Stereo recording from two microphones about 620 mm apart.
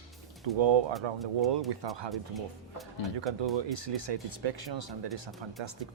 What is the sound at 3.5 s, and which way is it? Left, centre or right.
Speech, right.